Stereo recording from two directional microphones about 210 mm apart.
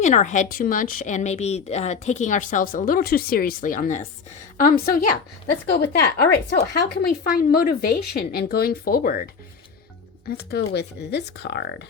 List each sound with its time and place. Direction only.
0.0 s a woman's voice: 35° left (ahead or behind); by 11.6 s 55° left (ahead or behind)